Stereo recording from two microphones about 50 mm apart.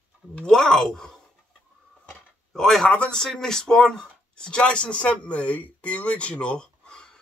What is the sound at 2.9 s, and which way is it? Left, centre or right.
Speech, left.